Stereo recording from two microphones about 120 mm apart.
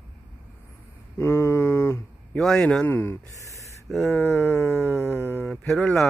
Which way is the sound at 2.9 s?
20° left (ahead or behind).